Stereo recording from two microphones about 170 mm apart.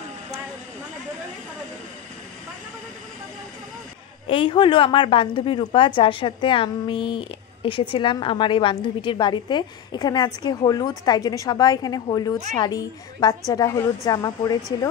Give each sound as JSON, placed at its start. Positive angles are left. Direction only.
{"t": 4.3, "sound": "a woman's voice", "side_deg": 30}